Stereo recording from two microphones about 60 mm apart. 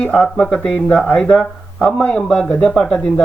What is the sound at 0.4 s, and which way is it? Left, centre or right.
Speech, centre.